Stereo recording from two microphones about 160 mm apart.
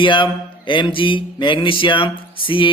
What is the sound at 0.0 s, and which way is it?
Mantra, 30° left (ahead or behind).